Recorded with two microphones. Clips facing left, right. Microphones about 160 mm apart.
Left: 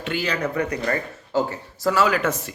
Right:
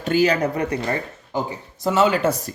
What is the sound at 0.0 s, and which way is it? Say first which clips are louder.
Speech: right 7 dB; 40° right (ahead or behind).